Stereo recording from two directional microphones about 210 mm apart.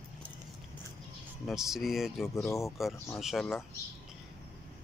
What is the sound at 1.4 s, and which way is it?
Speech, centre (ahead or behind).